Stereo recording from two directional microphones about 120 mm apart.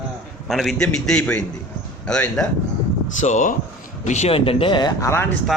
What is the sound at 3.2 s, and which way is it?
Speech, 90° left.